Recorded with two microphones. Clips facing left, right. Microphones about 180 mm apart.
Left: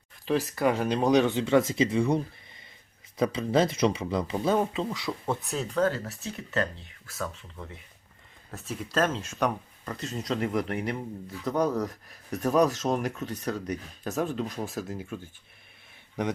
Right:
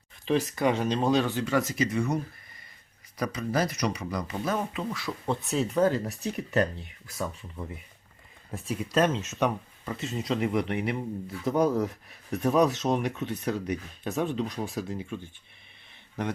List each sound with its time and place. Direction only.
0.3 s speech: 5° left (ahead or behind); by 4.9 s 25° left (ahead or behind)
4.9 s speech: 15° left (ahead or behind)
5.4 s speech: centre (ahead or behind)